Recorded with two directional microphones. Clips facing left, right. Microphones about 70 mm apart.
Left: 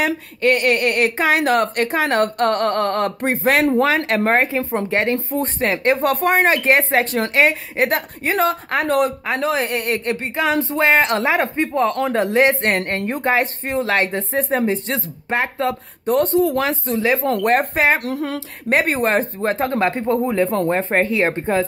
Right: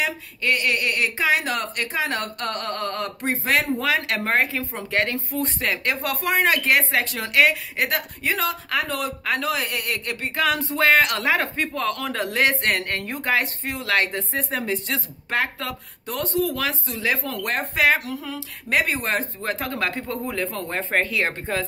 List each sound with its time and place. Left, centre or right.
0.0 s speech: left
3.8 s speech: left
9.2 s speech: left
16.1 s speech: left
16.3 s speech: left
17.3 s speech: left
18.0 s a sound: left
18.7 s speech: left